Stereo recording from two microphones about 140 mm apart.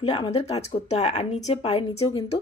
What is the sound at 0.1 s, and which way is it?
Speech, 40° left (ahead or behind).